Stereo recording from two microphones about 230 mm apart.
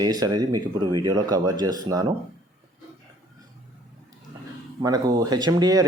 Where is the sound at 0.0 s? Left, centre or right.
Centre.